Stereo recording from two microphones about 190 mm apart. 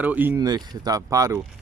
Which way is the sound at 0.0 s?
10° right (ahead or behind).